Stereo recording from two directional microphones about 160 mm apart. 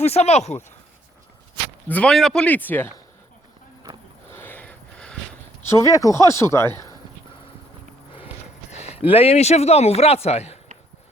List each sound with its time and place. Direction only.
0.0 s speech: 40° left (ahead or behind)
1.9 s speech: 5° left (ahead or behind)
4.3 s a sound: 15° left (ahead or behind)
5.6 s speech: 20° left (ahead or behind)
8.7 s a sound: 45° left (ahead or behind)
9.0 s speech: 35° left (ahead or behind)